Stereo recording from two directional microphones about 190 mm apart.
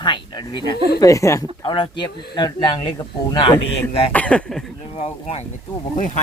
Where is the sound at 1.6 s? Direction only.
25° left (ahead or behind).